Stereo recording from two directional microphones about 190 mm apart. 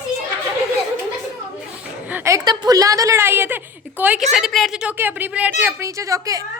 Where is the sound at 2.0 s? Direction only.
10° right (ahead or behind).